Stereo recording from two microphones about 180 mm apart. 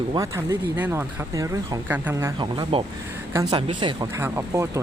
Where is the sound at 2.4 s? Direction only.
30° right (ahead or behind).